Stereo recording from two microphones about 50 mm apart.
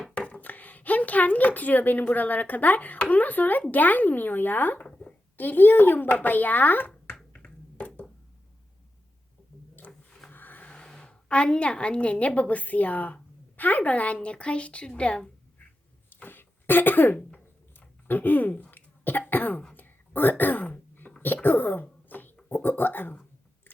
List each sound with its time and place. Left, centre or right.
0.1 s speech: left
4.9 s a sound: left
5.4 s speech: left
7.3 s finger snapping: left
10.1 s a sound: centre
10.3 s vehicle: left
10.7 s a woman's voice: centre
16.0 s cough: left
19.7 s throat clearing: left
21.4 s a sound: left
22.4 s speech: left